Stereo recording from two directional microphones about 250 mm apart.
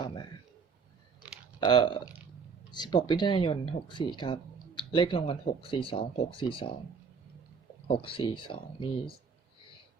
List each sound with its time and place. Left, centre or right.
1.5 s speech: centre
7.9 s speech: left